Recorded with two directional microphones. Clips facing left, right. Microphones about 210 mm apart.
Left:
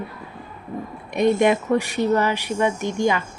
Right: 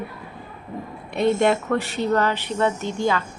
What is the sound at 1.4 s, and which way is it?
A woman's voice, 15° left (ahead or behind).